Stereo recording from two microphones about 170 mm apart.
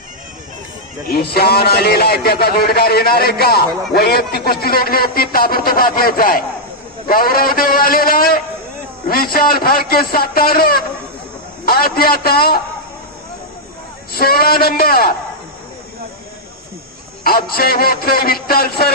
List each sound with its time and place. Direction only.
1.3 s speech: 65° left (ahead or behind)
14.1 s speech: 60° left (ahead or behind)
17.5 s speech: 65° left (ahead or behind)